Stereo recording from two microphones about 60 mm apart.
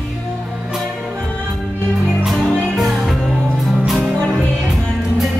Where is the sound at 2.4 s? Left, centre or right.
Centre.